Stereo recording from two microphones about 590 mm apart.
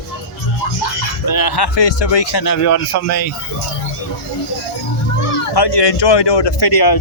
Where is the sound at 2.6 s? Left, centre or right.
Left.